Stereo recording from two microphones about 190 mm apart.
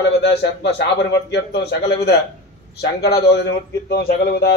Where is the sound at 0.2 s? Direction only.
60° left (ahead or behind).